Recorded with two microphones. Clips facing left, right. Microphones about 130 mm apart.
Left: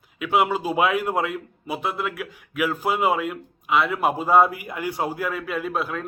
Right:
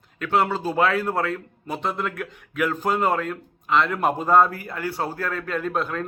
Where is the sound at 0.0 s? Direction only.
10° left (ahead or behind).